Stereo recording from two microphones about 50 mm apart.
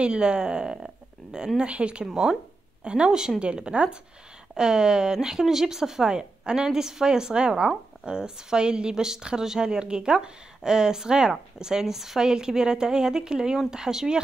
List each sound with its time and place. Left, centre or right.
0.0 s a woman's voice: right
2.0 s speech: centre
2.8 s a woman's voice: centre